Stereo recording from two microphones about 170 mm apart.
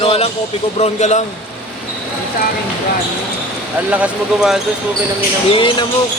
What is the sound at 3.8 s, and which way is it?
Speech, 10° right (ahead or behind).